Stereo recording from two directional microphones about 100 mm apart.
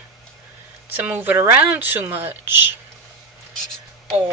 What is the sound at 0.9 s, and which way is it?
Speech, 20° right (ahead or behind).